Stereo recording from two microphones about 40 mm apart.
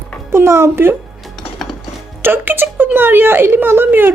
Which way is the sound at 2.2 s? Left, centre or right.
Right.